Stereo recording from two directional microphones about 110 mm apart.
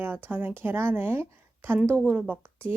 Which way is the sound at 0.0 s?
20° right (ahead or behind).